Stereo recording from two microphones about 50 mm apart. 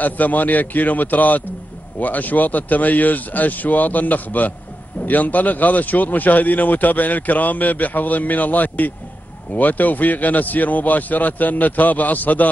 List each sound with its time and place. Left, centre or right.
0.0 s speech: left